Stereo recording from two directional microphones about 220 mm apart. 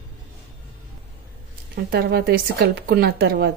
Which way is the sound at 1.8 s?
45° right (ahead or behind).